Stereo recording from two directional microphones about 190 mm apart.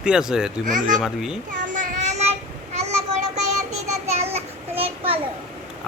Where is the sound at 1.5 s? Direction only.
40° right (ahead or behind).